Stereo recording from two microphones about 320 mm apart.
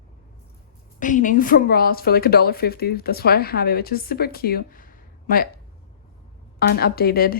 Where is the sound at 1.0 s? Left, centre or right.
Left.